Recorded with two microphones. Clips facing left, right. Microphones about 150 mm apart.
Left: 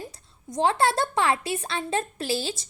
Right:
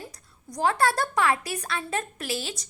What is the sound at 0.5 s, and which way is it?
A woman's voice, 25° left (ahead or behind).